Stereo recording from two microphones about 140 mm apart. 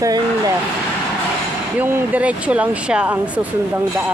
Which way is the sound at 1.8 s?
15° right (ahead or behind).